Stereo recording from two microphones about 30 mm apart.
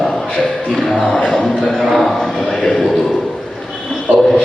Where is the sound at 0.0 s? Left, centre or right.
Centre.